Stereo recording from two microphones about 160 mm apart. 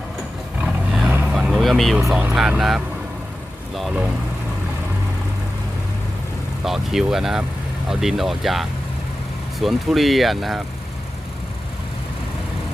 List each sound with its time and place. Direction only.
0.6 s vehicle: 5° right (ahead or behind)
2.0 s speech: 15° right (ahead or behind)
6.7 s speech: centre (ahead or behind)